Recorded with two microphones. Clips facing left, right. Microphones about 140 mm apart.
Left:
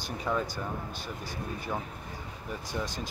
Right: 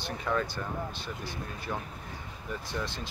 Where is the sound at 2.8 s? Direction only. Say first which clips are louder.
Left 1 dB; 40° left (ahead or behind).